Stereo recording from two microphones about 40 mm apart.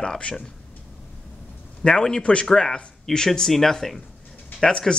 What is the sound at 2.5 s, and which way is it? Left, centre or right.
Speech, centre.